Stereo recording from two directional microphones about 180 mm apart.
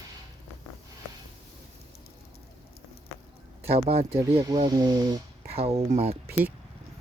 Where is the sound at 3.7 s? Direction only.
35° right (ahead or behind).